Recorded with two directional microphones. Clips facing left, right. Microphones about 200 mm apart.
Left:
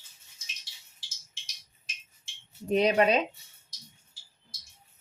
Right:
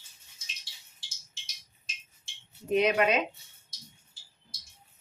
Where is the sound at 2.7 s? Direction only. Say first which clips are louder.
Left 2 dB; 35° left (ahead or behind).